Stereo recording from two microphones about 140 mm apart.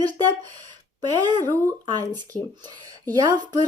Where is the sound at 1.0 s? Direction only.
30° right (ahead or behind).